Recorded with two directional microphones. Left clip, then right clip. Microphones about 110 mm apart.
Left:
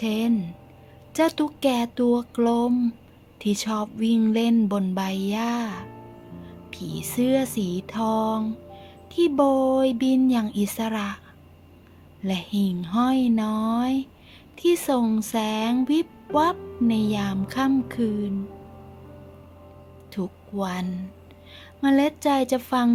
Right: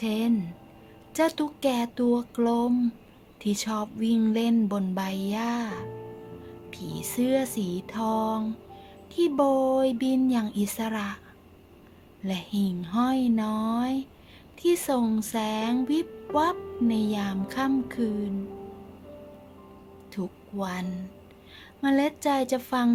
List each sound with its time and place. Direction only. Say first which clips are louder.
0.0 s music: left 2 dB; 35° left (ahead or behind)
12.2 s music: left 4 dB; 45° left (ahead or behind)
20.1 s a woman's voice: left 4 dB; 45° left (ahead or behind)